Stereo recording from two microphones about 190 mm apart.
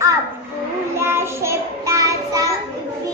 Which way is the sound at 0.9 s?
15° right (ahead or behind).